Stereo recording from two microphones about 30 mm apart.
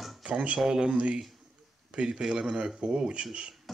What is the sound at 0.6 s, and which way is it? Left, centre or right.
Speech, centre.